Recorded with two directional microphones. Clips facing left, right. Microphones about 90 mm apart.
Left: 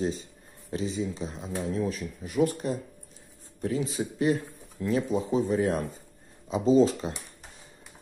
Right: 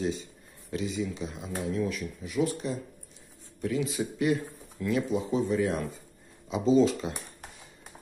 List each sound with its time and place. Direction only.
0.0 s speech: 35° left (ahead or behind)
3.6 s speech: 35° left (ahead or behind)